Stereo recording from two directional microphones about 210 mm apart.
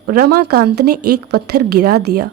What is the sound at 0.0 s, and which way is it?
A woman's voice, 45° right (ahead or behind).